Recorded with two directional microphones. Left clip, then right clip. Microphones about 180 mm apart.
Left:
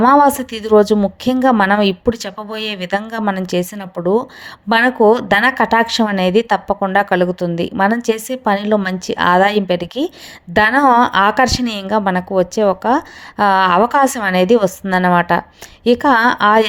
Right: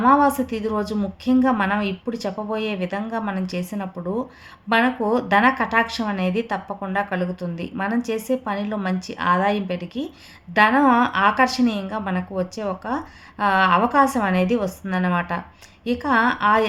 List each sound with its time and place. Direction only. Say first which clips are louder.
0.0 s a woman's voice: left 6 dB; 45° left (ahead or behind)